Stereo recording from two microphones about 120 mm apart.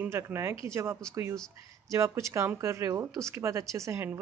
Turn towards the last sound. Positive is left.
turn(degrees=-20)  # may be behind; listen again after turning